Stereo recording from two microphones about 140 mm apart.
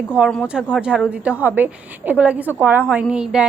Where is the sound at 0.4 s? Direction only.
5° right (ahead or behind).